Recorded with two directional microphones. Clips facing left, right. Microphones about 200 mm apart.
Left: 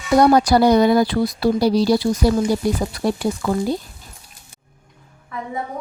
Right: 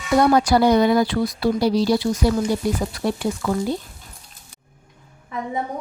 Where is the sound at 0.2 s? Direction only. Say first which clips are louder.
Left 2 dB; 40° left (ahead or behind).